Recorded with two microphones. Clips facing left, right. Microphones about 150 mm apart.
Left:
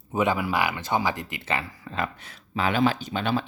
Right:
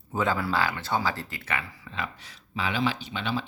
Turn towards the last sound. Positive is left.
turn(degrees=50)  # may be behind; listen again after turning